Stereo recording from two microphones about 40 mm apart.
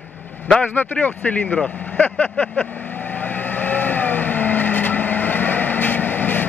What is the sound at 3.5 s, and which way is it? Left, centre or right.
Vehicle, left.